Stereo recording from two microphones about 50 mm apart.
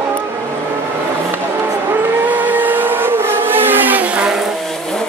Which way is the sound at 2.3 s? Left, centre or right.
Right.